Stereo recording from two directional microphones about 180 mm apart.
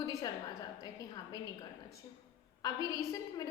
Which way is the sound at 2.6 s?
20° left (ahead or behind).